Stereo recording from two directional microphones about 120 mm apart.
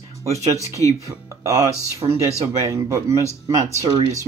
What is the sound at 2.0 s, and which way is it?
Speech, 45° right (ahead or behind).